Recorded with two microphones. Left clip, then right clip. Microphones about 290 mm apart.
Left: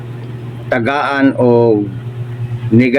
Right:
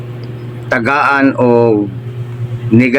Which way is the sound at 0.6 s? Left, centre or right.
Centre.